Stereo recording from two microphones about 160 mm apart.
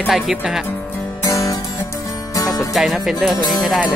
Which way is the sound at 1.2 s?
20° left (ahead or behind).